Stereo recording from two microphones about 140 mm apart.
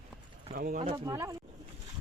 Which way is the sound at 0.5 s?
90° right.